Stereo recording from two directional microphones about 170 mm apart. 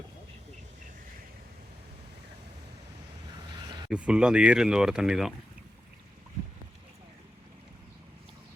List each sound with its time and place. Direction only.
3.8 s speech: 5° right (ahead or behind)